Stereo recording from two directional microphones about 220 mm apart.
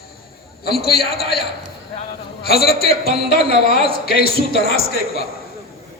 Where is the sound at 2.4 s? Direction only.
45° left (ahead or behind).